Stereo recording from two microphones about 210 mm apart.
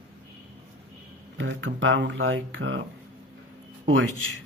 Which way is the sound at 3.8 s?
70° right (ahead or behind).